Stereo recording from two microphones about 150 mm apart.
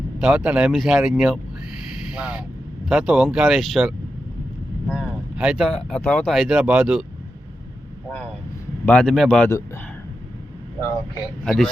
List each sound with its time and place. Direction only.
0.2 s speech: 5° right (ahead or behind)
4.9 s vehicle: 5° right (ahead or behind)
5.6 s speech: 5° left (ahead or behind)
8.9 s speech: 5° left (ahead or behind)
11.4 s speech: 5° left (ahead or behind)